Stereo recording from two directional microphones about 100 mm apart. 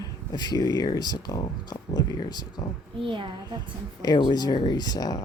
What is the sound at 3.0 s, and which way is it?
Speech, 60° right (ahead or behind).